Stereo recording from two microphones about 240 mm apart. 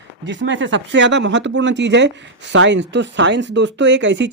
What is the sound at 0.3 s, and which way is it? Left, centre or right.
Speech, right.